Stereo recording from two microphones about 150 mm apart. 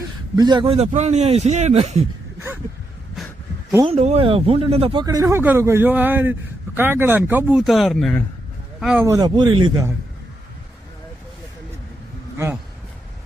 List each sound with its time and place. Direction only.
0.3 s speech: 30° right (ahead or behind)
0.9 s a man's voice: 50° right (ahead or behind)
3.8 s speech: 45° right (ahead or behind)
5.0 s a man's voice: 25° right (ahead or behind); by 9.0 s 5° right (ahead or behind)
9.0 s a man's voice: 25° right (ahead or behind)